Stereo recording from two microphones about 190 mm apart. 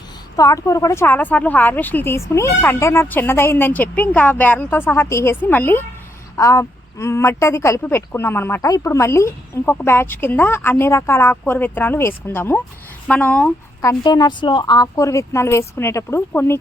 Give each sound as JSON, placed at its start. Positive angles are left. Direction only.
{"t": 0.3, "sound": "a woman's voice", "side_deg": 15}
{"t": 14.0, "sound": "a woman's voice", "side_deg": 25}